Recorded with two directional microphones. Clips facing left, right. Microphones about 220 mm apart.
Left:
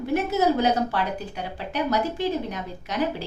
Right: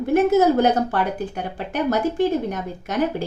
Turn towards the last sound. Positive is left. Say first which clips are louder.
# right 4 dB
turn(degrees=-50)  # may be behind; listen again after turning